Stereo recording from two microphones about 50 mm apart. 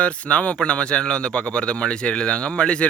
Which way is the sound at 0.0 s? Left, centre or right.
Left.